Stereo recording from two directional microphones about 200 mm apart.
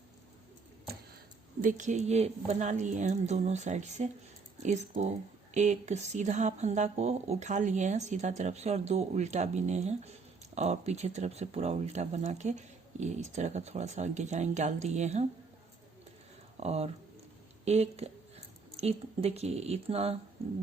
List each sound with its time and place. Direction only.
1.6 s speech: 35° right (ahead or behind)
16.6 s speech: 30° right (ahead or behind)